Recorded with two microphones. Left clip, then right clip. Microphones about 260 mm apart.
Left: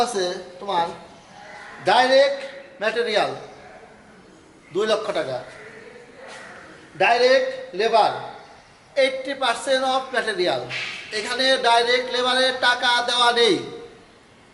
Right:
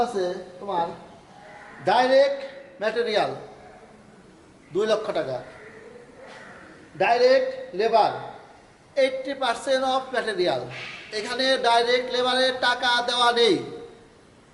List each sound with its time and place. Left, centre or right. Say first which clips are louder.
0.3 s speech: left 2 dB; right
1.8 s speech: left 2 dB; centre
4.7 s a man's voice: left 2 dB; centre
7.0 s speech: left 2 dB; centre